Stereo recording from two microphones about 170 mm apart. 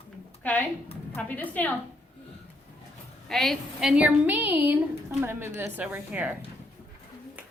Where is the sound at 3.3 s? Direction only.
Centre (ahead or behind).